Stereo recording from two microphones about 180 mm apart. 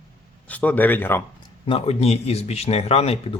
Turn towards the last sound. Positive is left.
turn(degrees=35)  # may be behind; listen again after turning